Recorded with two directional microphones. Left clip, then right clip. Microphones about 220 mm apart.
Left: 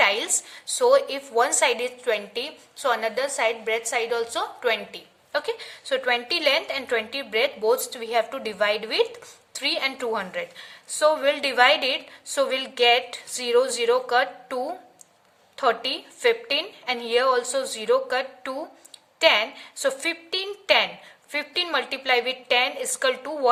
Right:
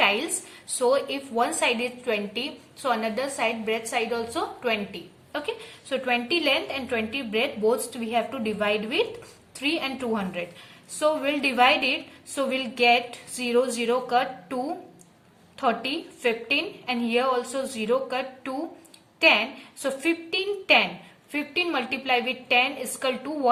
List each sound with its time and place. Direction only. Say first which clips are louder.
0.8 s a woman's voice: left 4 dB; 45° left (ahead or behind)